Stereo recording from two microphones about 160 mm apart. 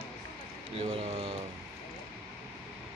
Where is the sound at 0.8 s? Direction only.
35° right (ahead or behind).